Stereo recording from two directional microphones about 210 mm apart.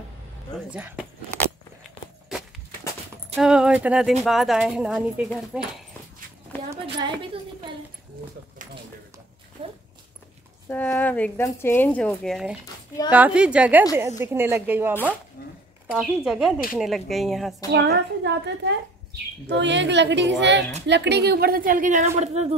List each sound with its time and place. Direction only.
0.7 s speech: 5° right (ahead or behind)
1.8 s walk: centre (ahead or behind)
3.3 s speech: 5° right (ahead or behind)
9.6 s speech: 30° right (ahead or behind)
10.7 s speech: 10° left (ahead or behind); by 15.0 s 10° right (ahead or behind)
15.4 s a sound: 45° left (ahead or behind)
15.9 s speech: centre (ahead or behind)
17.6 s a woman's voice: 55° right (ahead or behind); by 22.5 s 30° right (ahead or behind)